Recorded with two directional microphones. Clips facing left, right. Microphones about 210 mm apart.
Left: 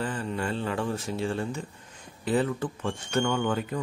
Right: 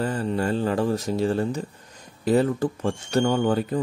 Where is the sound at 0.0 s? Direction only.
40° right (ahead or behind).